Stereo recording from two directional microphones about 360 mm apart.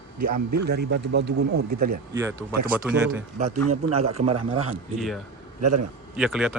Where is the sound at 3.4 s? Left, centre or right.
Right.